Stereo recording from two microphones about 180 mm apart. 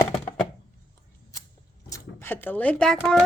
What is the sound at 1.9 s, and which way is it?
Speech, 15° left (ahead or behind).